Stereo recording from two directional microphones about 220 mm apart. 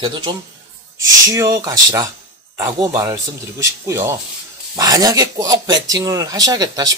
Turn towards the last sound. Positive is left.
turn(degrees=-15)  # may be behind; listen again after turning